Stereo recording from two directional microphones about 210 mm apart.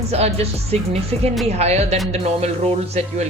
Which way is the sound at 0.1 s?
30° right (ahead or behind).